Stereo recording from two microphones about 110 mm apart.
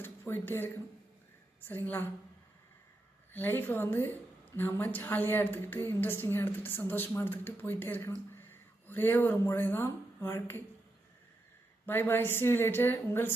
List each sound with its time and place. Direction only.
0.0 s a sound: 20° left (ahead or behind)
1.6 s a woman's voice: 20° left (ahead or behind)
3.3 s a woman's voice: 20° left (ahead or behind)
11.9 s a woman's voice: 20° left (ahead or behind)